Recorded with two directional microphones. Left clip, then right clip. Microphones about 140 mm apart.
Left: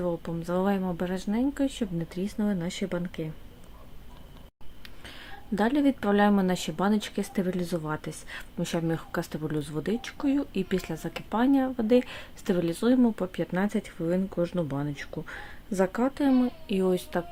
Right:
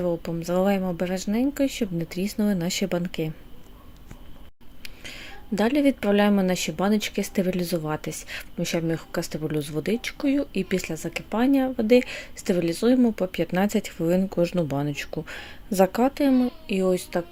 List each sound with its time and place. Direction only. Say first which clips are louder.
0.0 s speech: right 4 dB; 15° right (ahead or behind)
4.8 s speech: right 6 dB; 10° right (ahead or behind); by 16.1 s 25° right (ahead or behind)
16.1 s a child's voice: right 3 dB; 10° right (ahead or behind)